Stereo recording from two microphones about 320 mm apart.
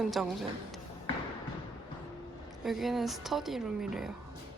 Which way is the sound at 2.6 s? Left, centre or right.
Centre.